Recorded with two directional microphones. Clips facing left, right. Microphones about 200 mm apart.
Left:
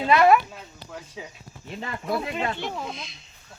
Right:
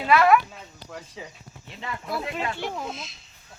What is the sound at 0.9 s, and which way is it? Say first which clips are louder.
Speech: even; centre (ahead or behind).